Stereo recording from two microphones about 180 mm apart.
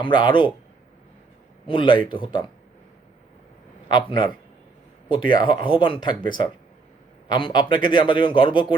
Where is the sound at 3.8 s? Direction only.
25° left (ahead or behind).